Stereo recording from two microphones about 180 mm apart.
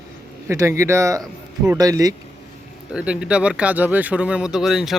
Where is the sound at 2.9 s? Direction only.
5° right (ahead or behind).